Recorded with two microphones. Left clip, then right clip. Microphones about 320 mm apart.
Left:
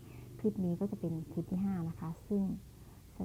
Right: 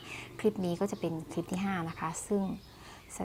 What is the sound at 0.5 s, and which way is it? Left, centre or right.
Speech, right.